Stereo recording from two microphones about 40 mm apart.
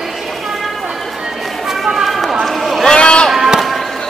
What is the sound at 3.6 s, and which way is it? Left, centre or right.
Music, centre.